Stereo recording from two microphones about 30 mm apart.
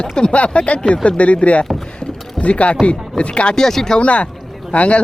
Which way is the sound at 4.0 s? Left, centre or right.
Left.